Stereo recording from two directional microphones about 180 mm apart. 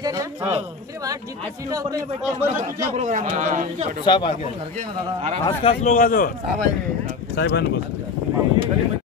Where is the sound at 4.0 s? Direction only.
25° left (ahead or behind).